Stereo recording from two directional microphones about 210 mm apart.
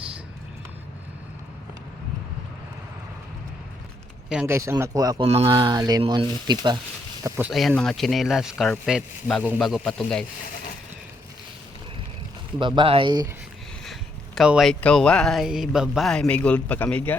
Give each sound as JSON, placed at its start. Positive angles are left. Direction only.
{"t": 4.3, "sound": "speech", "side_deg": -10}
{"t": 7.3, "sound": "speech", "side_deg": -10}
{"t": 7.5, "sound": "speech", "side_deg": 0}
{"t": 12.5, "sound": "speech", "side_deg": -20}
{"t": 13.8, "sound": "speech", "side_deg": 0}